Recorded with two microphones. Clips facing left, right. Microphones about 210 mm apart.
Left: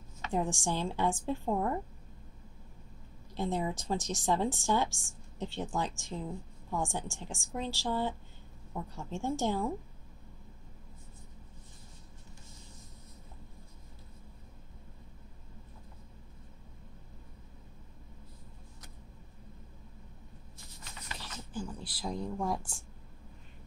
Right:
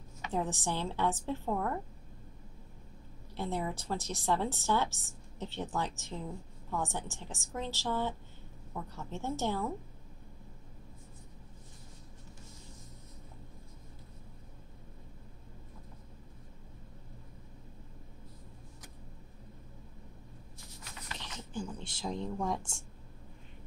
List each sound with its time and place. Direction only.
0.3 s a woman's voice: 15° left (ahead or behind)
3.3 s a woman's voice: 15° left (ahead or behind)
21.2 s a sound: 5° left (ahead or behind)
22.0 s speech: centre (ahead or behind)
22.6 s a woman's voice: 25° right (ahead or behind)